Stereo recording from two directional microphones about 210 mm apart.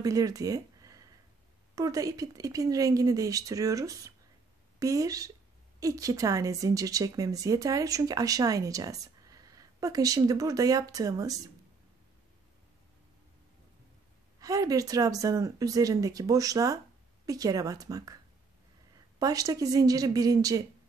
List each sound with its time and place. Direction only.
0.0 s a woman's voice: 15° right (ahead or behind)
14.4 s a woman's voice: 15° right (ahead or behind)
19.1 s a woman's voice: 15° right (ahead or behind)